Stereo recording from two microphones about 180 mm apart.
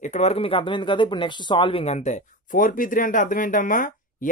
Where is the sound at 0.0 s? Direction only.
40° left (ahead or behind).